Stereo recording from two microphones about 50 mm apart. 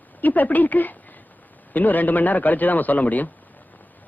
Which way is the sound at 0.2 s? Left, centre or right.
Left.